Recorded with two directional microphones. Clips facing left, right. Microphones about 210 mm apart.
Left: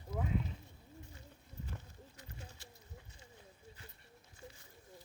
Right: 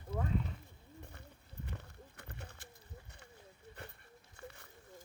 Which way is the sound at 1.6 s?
65° right (ahead or behind).